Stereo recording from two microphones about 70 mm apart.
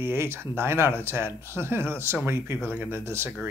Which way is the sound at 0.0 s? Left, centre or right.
Right.